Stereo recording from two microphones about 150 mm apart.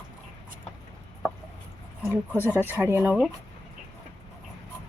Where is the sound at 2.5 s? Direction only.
10° right (ahead or behind).